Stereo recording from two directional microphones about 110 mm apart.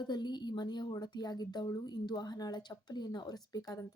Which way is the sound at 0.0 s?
40° left (ahead or behind).